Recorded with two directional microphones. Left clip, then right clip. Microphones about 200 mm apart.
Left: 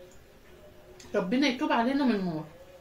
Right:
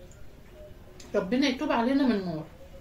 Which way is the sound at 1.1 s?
15° right (ahead or behind).